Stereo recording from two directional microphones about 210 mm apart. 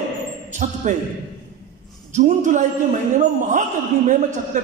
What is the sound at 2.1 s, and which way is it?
Speech, 35° right (ahead or behind).